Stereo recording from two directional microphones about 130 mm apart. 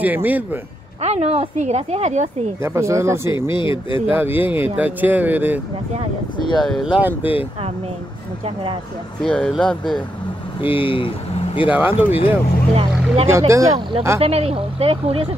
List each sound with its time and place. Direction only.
0.0 s speech: 15° right (ahead or behind)
1.0 s a woman's voice: 55° right (ahead or behind)
2.6 s speech: 20° right (ahead or behind)
3.5 s speech: 40° left (ahead or behind)
4.1 s speech: 15° right (ahead or behind)
6.3 s speech: 35° left (ahead or behind)
6.6 s speech: 5° left (ahead or behind)
7.0 s speech: 15° right (ahead or behind)
9.2 s speech: 5° left (ahead or behind)
10.6 s speech: 40° left (ahead or behind)
11.7 s speech: 15° right (ahead or behind)
12.7 s speech: 50° right (ahead or behind)
13.3 s speech: 25° right (ahead or behind)
14.2 s speech: 50° right (ahead or behind)